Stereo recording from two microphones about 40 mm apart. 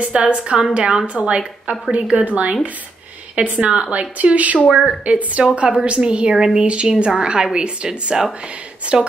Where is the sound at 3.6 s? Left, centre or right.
Right.